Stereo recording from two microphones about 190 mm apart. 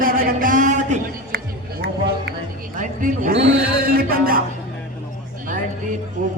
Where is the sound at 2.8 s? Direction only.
45° right (ahead or behind).